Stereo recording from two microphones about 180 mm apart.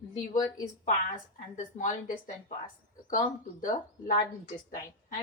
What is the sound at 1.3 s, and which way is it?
Speech, 45° left (ahead or behind).